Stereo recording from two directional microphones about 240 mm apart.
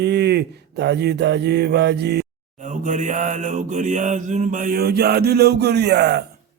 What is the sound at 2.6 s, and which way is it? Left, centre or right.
Mantra, right.